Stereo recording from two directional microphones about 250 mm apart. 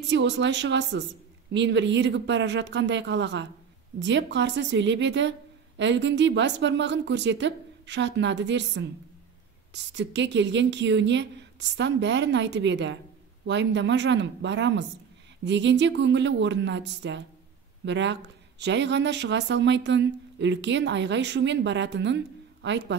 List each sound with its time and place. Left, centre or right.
0.1 s speech: right